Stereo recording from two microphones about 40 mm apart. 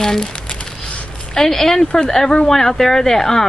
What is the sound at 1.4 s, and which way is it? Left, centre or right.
Speech, centre.